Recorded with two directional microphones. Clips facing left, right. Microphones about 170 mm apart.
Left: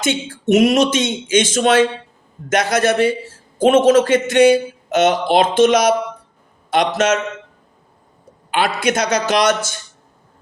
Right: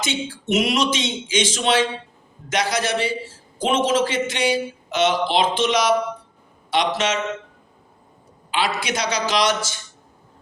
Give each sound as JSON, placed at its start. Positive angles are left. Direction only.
{"t": 0.0, "sound": "a man's voice", "side_deg": 50}
{"t": 8.4, "sound": "a man's voice", "side_deg": 50}